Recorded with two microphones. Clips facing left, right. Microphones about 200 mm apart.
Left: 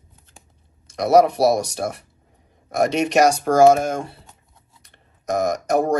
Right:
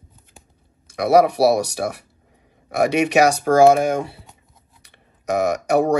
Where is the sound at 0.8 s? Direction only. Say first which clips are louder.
Even; 60° right (ahead or behind).